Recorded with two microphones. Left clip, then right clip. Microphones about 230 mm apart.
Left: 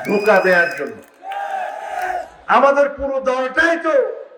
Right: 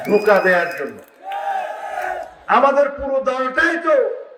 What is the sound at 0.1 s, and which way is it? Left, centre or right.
Speech, left.